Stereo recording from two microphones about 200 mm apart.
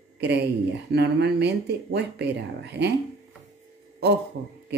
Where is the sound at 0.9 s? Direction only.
55° right (ahead or behind).